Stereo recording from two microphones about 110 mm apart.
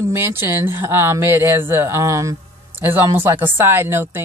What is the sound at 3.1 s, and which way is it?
Speech, 15° right (ahead or behind).